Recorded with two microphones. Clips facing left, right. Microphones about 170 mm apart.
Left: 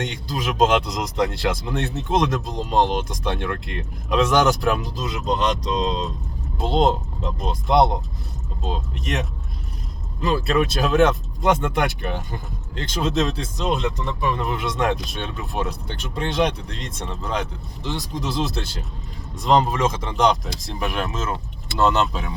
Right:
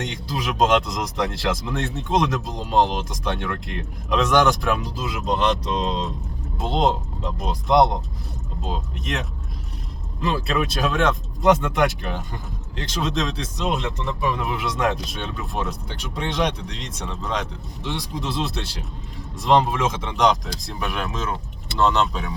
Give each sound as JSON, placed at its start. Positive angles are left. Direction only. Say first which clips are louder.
{"t": 0.0, "sound": "speech", "louder": "left 1 dB", "side_deg": 0}
{"t": 16.6, "sound": "speech", "louder": "left 1 dB", "side_deg": 50}
{"t": 17.8, "sound": "speech", "louder": "left 1 dB", "side_deg": 0}